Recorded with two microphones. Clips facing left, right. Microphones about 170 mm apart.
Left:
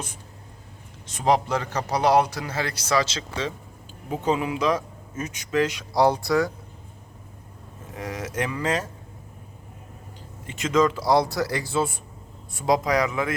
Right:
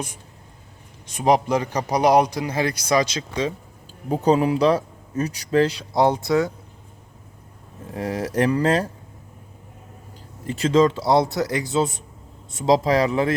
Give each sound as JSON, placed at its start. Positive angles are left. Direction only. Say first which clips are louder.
{"t": 1.1, "sound": "a man's voice", "louder": "right 3 dB", "side_deg": -15}
{"t": 4.1, "sound": "speech", "louder": "right 6 dB", "side_deg": -40}
{"t": 7.9, "sound": "speech", "louder": "right 7 dB", "side_deg": -35}
{"t": 10.4, "sound": "a man's voice", "louder": "right 4 dB", "side_deg": -35}